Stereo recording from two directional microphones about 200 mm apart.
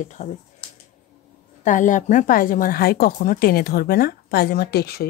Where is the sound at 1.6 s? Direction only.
40° left (ahead or behind).